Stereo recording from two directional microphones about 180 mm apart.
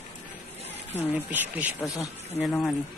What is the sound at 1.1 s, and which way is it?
Speech, 10° right (ahead or behind).